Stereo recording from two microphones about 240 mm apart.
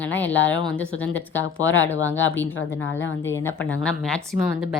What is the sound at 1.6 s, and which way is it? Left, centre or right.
Speech, left.